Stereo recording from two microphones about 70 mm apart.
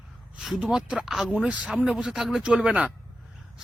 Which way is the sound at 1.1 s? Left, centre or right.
Centre.